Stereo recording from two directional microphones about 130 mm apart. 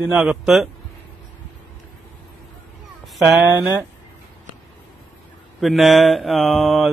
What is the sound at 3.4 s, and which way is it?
Speech, 20° right (ahead or behind).